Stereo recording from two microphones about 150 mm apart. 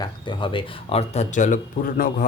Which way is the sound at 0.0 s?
30° left (ahead or behind).